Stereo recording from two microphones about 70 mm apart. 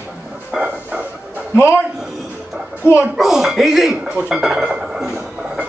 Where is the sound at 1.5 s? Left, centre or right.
Left.